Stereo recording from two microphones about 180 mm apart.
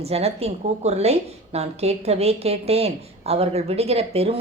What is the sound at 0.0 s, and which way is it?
A woman's voice, 35° right (ahead or behind).